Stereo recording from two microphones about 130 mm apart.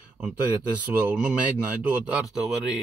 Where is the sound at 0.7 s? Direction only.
10° right (ahead or behind).